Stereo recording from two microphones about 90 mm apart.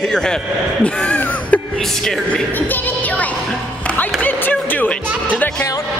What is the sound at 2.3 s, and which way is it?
Speech, 20° left (ahead or behind).